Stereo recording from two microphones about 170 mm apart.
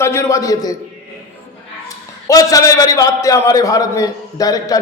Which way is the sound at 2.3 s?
20° left (ahead or behind).